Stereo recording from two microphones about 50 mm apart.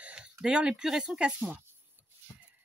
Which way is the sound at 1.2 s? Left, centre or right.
Right.